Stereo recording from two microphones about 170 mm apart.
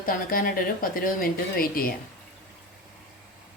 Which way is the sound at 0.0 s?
60° left (ahead or behind).